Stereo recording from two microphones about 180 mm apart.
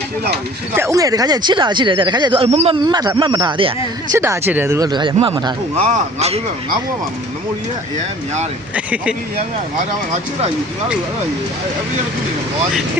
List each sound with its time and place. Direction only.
0.8 s speech: 20° right (ahead or behind); by 2.7 s 35° right (ahead or behind)
2.9 s speech: 20° right (ahead or behind)
4.1 s speech: 15° right (ahead or behind)
5.8 s speech: 40° right (ahead or behind)
8.7 s speech: 5° right (ahead or behind)